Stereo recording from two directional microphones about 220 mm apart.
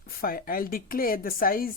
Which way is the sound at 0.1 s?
40° left (ahead or behind).